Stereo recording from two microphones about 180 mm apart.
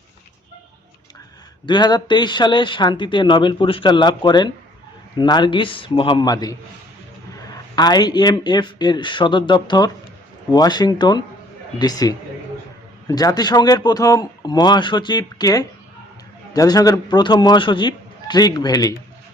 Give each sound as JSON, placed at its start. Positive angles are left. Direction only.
{"t": 1.6, "sound": "speech", "side_deg": 25}
{"t": 7.8, "sound": "speech", "side_deg": 25}